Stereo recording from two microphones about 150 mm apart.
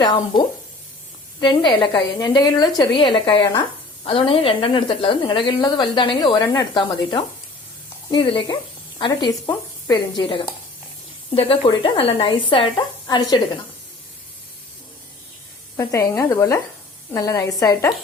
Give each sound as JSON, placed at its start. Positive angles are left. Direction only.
{"t": 0.0, "sound": "a woman's voice", "side_deg": 30}
{"t": 15.8, "sound": "a woman's voice", "side_deg": 20}